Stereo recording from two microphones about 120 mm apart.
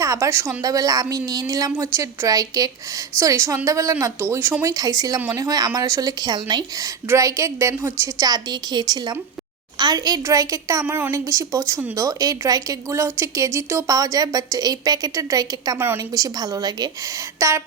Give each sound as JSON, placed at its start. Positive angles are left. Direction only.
{"t": 0.0, "sound": "a woman's voice", "side_deg": -25}